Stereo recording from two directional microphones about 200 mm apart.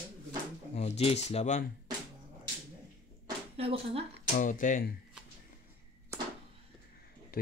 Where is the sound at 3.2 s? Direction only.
30° right (ahead or behind).